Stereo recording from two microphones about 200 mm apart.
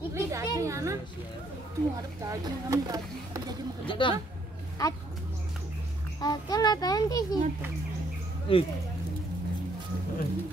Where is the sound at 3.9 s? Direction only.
25° left (ahead or behind).